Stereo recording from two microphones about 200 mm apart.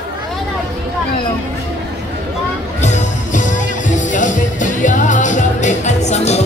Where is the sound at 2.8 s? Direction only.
35° left (ahead or behind).